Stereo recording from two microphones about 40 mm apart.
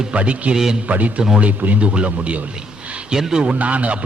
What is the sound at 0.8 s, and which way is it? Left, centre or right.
A man's voice, right.